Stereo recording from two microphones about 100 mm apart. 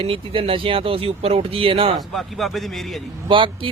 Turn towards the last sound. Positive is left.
turn(degrees=-55)  # may be behind; listen again after turning